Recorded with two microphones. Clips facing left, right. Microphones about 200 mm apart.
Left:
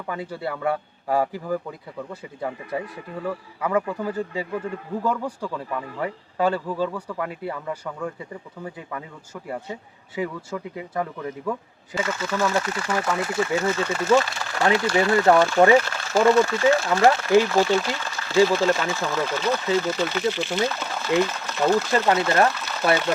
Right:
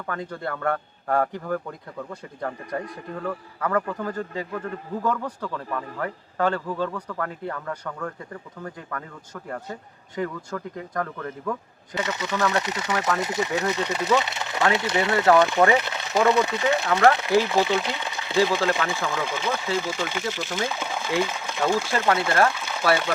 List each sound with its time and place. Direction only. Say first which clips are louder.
0.0 s speech: left 1 dB; 10° left (ahead or behind)
11.9 s speech: left 1 dB; 20° right (ahead or behind)
21.9 s speech: left 2 dB; 15° left (ahead or behind)
22.5 s a sound: even; 10° right (ahead or behind)